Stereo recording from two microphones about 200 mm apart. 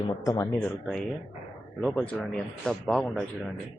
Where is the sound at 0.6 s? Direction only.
5° left (ahead or behind).